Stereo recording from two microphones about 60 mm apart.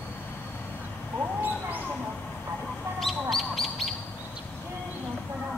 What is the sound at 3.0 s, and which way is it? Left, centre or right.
Bird, centre.